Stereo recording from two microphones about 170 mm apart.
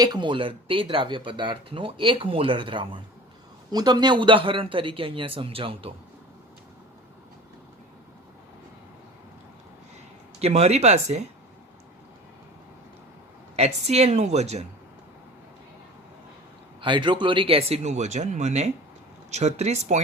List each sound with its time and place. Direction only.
0.0 s speech: 25° right (ahead or behind)
10.4 s speech: 40° right (ahead or behind)
13.6 s speech: 40° right (ahead or behind)
16.8 s speech: 30° right (ahead or behind)